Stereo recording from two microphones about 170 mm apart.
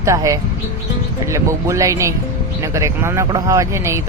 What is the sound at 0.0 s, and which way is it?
Speech, 20° right (ahead or behind).